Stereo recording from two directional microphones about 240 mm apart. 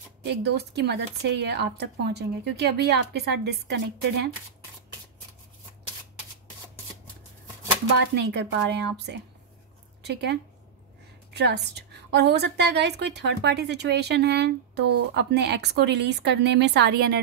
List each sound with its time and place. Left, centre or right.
0.3 s speech: right
8.1 s speech: right